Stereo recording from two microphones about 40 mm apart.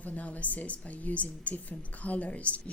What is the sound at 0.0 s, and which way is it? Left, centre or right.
A woman's voice, left.